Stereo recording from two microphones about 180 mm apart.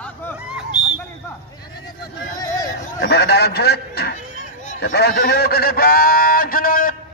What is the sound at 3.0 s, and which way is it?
Speech, 65° left (ahead or behind).